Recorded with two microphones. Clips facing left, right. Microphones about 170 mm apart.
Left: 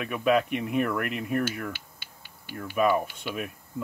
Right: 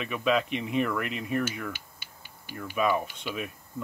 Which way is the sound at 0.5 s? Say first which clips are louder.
Left 1 dB; 50° left (ahead or behind).